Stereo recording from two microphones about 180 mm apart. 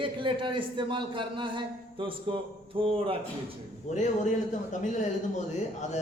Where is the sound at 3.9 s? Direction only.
40° left (ahead or behind).